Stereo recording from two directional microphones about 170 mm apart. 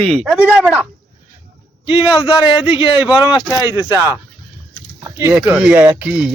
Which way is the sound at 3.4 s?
15° right (ahead or behind).